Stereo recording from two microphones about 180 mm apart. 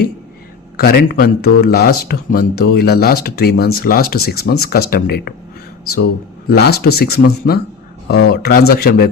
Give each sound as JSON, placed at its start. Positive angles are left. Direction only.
{"t": 0.8, "sound": "speech", "side_deg": 60}